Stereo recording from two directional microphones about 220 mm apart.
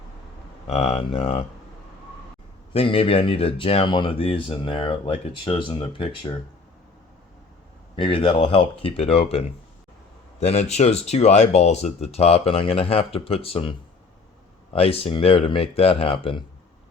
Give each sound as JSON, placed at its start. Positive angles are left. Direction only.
{"t": 0.7, "sound": "speech", "side_deg": 30}
{"t": 2.7, "sound": "speech", "side_deg": 25}
{"t": 7.9, "sound": "speech", "side_deg": 25}